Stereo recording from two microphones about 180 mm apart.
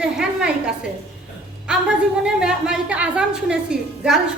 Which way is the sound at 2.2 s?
5° right (ahead or behind).